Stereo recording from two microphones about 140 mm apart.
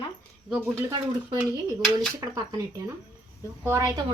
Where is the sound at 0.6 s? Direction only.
15° right (ahead or behind).